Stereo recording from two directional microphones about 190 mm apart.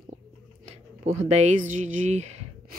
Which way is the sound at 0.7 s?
35° right (ahead or behind).